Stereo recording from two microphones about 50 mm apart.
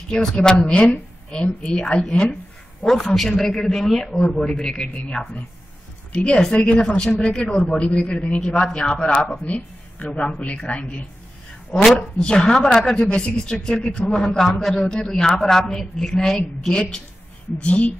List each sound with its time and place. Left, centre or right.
0.1 s speech: centre
0.7 s a man's voice: left
3.2 s speech: centre
6.1 s a man's voice: left
12.2 s speech: centre
14.4 s a man's voice: centre; by 17.9 s left